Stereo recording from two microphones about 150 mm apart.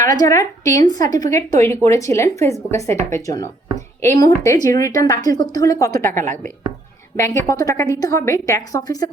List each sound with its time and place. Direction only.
0.0 s a woman's voice: 20° left (ahead or behind)
6.1 s a woman's voice: 60° right (ahead or behind)
7.2 s a woman's voice: 20° left (ahead or behind)